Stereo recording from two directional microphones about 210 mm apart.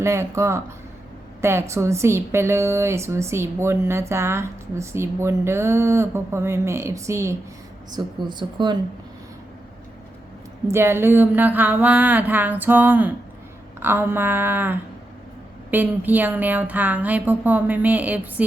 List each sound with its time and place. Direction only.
0.0 s a woman's voice: 15° right (ahead or behind)
10.7 s a woman's voice: 10° right (ahead or behind)